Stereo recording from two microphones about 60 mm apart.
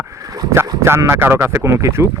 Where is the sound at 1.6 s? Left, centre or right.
Right.